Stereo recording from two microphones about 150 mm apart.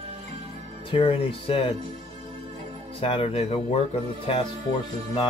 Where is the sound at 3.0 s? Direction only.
40° left (ahead or behind).